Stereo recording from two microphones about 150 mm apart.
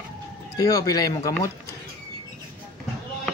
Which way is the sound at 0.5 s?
25° left (ahead or behind).